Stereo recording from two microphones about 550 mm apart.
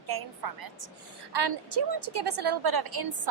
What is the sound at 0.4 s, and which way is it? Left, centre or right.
A woman's voice, right.